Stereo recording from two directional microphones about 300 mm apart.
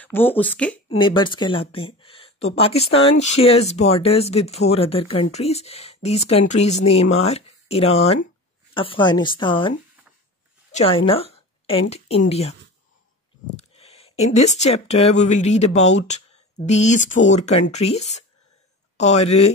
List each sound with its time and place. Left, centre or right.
0.0 s speech: centre
0.8 s a woman's voice: centre
13.7 s speech: centre